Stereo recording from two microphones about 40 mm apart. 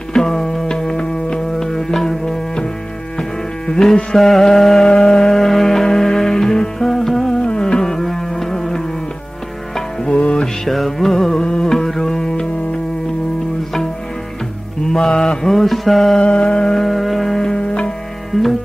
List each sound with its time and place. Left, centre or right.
0.1 s music: centre
3.7 s mantra: centre
4.8 s music: centre
7.3 s music: left
10.1 s music: left
10.4 s music: centre
11.4 s carnatic music: left
11.7 s music: centre
14.9 s mantra: centre
16.2 s music: left
16.7 s music: centre
17.6 s music: left
18.3 s music: centre